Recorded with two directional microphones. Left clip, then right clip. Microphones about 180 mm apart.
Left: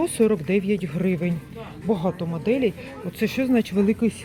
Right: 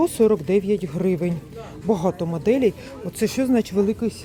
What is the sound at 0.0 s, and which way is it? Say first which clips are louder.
A woman's voice: right 3 dB; 15° right (ahead or behind).